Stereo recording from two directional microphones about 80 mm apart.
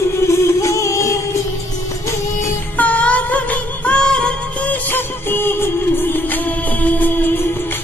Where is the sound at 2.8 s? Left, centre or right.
Centre.